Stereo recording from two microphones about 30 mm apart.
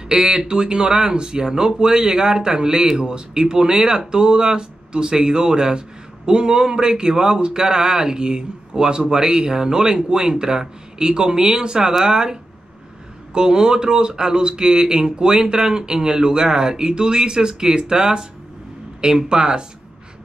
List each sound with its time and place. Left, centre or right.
0.1 s speech: right